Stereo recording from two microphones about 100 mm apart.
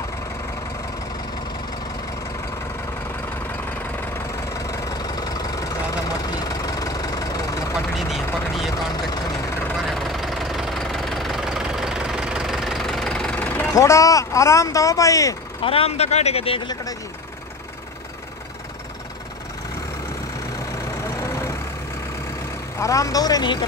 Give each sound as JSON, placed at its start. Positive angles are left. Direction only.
{"t": 4.6, "sound": "vehicle", "side_deg": 35}
{"t": 8.0, "sound": "vehicle", "side_deg": 0}
{"t": 9.8, "sound": "engine", "side_deg": 0}
{"t": 13.7, "sound": "speech", "side_deg": 30}
{"t": 15.6, "sound": "speech", "side_deg": 70}
{"t": 21.0, "sound": "vehicle", "side_deg": 30}
{"t": 22.8, "sound": "speech", "side_deg": 35}